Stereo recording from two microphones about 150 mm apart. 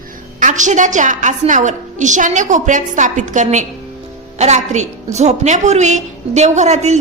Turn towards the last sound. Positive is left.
turn(degrees=-50)  # may be behind; listen again after turning